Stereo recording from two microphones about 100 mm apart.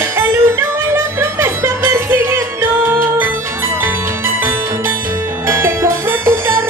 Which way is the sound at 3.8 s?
20° right (ahead or behind).